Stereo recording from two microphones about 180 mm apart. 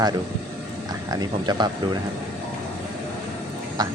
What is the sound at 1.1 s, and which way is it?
Speech, 25° right (ahead or behind).